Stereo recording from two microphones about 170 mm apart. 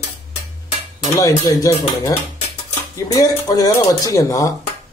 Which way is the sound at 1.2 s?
20° left (ahead or behind).